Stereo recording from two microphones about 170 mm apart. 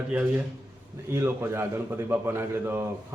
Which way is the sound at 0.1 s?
10° right (ahead or behind).